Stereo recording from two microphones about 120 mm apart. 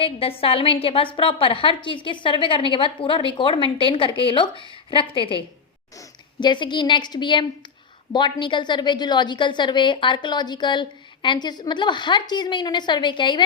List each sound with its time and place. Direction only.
0.0 s a woman's voice: 50° left (ahead or behind)
6.4 s a woman's voice: 40° left (ahead or behind)